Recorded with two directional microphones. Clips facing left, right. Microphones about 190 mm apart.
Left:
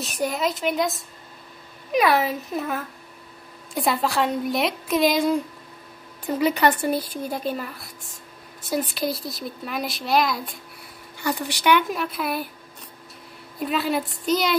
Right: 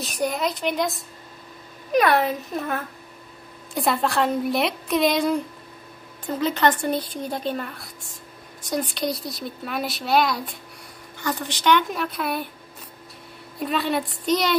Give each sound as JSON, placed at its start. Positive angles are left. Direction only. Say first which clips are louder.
{"t": 0.0, "sound": "speech", "louder": "even", "side_deg": 0}
{"t": 11.1, "sound": "speech", "louder": "left 1 dB", "side_deg": 10}
{"t": 13.6, "sound": "speech", "louder": "even", "side_deg": 0}